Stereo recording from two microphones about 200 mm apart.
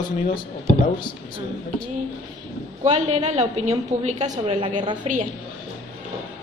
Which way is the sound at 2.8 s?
35° right (ahead or behind).